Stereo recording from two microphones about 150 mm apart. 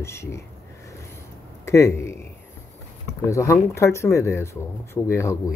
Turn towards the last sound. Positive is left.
turn(degrees=15)  # may be behind; listen again after turning